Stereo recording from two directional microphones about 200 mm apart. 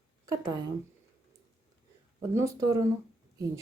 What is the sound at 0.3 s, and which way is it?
Speech, 20° right (ahead or behind).